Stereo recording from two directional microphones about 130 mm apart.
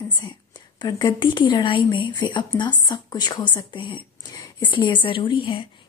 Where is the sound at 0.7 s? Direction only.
35° left (ahead or behind).